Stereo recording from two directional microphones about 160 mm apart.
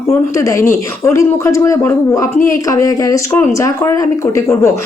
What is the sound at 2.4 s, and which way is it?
Speech, 55° left (ahead or behind).